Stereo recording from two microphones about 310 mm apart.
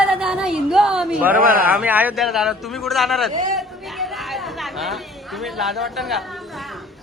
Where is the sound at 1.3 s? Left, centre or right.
Right.